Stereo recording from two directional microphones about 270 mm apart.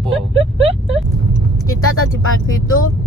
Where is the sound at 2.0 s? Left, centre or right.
Left.